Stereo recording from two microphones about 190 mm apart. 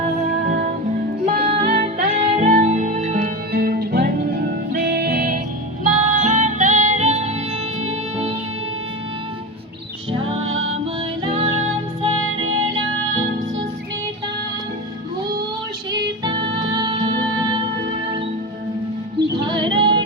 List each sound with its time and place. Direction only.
0.0 s music: 40° right (ahead or behind)
3.5 s music: 55° right (ahead or behind); by 8.4 s 30° right (ahead or behind)
10.1 s music: 30° right (ahead or behind)
10.4 s music: 90° right
11.2 s music: 25° right (ahead or behind)
16.2 s music: 25° right (ahead or behind)
19.5 s female singing: 25° right (ahead or behind)